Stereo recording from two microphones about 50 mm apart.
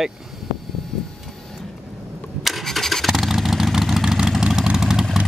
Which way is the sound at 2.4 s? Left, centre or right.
Centre.